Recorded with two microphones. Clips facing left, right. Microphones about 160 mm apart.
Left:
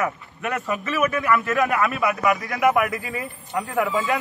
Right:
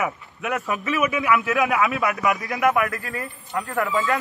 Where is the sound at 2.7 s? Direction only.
15° left (ahead or behind).